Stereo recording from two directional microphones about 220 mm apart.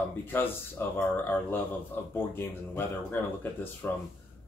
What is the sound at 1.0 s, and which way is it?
Speech, 10° left (ahead or behind).